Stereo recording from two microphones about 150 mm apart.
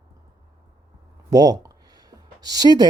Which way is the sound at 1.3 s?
25° right (ahead or behind).